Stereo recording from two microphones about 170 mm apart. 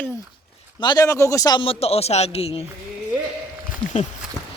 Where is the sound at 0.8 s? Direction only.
25° left (ahead or behind).